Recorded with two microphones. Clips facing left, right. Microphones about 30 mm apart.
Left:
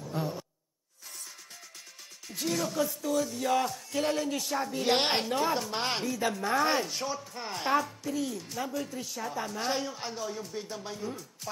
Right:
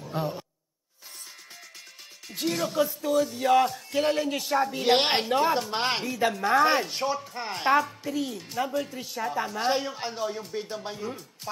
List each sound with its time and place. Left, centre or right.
0.1 s speech: right
2.2 s speech: centre